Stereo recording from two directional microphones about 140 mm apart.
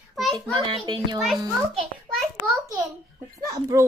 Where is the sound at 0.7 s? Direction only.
35° right (ahead or behind).